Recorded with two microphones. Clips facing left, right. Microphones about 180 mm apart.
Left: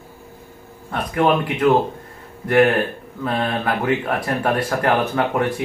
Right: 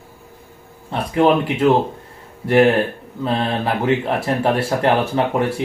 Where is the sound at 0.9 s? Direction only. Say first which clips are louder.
Right 3 dB; 25° right (ahead or behind).